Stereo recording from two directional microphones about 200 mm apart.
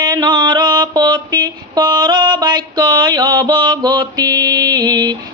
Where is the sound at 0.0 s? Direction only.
20° right (ahead or behind).